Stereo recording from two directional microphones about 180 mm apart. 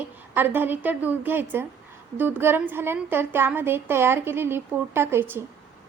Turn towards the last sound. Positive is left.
turn(degrees=-10)  # may be behind; listen again after turning